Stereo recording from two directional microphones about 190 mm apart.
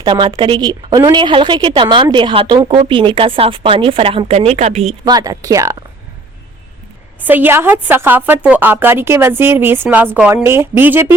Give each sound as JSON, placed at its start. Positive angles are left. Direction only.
{"t": 0.0, "sound": "a woman's voice", "side_deg": -25}
{"t": 5.0, "sound": "a woman's voice", "side_deg": -20}
{"t": 7.3, "sound": "a woman's voice", "side_deg": -10}